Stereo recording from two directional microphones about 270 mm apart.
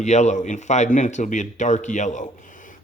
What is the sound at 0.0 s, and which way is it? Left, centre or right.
A man's voice, left.